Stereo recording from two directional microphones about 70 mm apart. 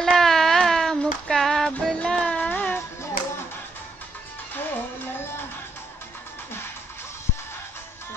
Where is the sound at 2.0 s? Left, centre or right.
Centre.